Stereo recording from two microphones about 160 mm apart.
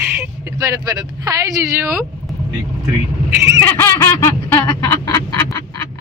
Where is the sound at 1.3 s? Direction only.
15° right (ahead or behind).